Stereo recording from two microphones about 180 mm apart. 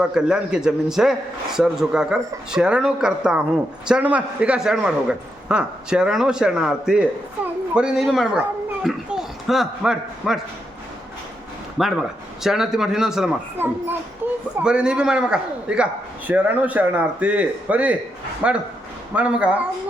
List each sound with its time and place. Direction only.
0.0 s a man's voice: 5° right (ahead or behind)
11.8 s a man's voice: centre (ahead or behind)